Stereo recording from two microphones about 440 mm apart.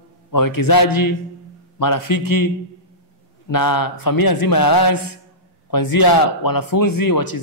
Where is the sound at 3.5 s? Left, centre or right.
Left.